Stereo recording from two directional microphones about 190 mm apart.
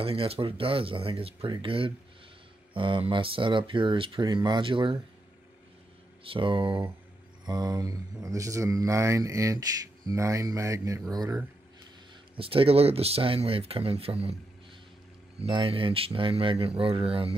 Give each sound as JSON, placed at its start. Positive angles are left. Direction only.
{"t": 0.0, "sound": "speech", "side_deg": -30}
{"t": 6.2, "sound": "speech", "side_deg": -25}
{"t": 12.4, "sound": "speech", "side_deg": -30}
{"t": 15.4, "sound": "speech", "side_deg": -30}